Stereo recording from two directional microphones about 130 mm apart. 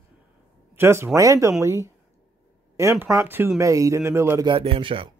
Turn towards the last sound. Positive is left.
turn(degrees=-40)  # may be behind; listen again after turning